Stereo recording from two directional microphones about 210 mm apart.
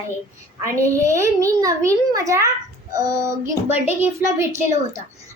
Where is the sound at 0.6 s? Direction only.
15° right (ahead or behind).